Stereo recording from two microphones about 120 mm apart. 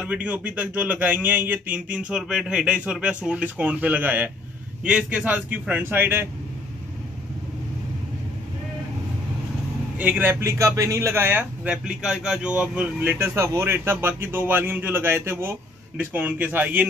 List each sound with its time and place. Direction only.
0.0 s a man's voice: 10° right (ahead or behind)
9.9 s a man's voice: 15° right (ahead or behind)